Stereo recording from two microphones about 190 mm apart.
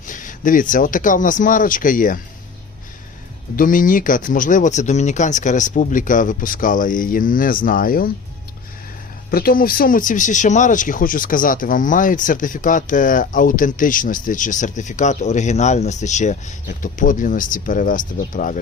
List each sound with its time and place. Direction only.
0.0 s speech: 45° left (ahead or behind)
3.5 s speech: 45° left (ahead or behind)
9.3 s speech: 50° left (ahead or behind)